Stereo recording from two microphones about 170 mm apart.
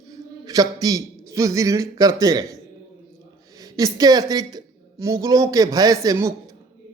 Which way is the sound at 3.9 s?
25° right (ahead or behind).